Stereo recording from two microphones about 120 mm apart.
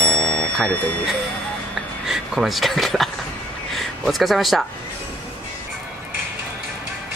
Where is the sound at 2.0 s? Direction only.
5° right (ahead or behind).